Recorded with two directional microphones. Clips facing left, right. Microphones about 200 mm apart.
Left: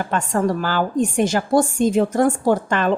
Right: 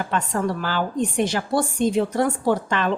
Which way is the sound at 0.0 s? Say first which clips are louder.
Left 3 dB; 45° left (ahead or behind).